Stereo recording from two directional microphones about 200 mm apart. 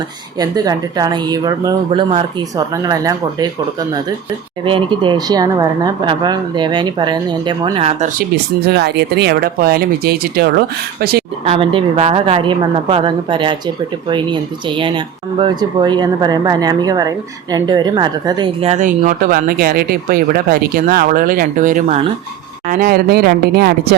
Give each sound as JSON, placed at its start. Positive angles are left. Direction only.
{"t": 0.3, "sound": "speech", "side_deg": -20}
{"t": 8.6, "sound": "speech", "side_deg": -55}
{"t": 11.4, "sound": "speech", "side_deg": -30}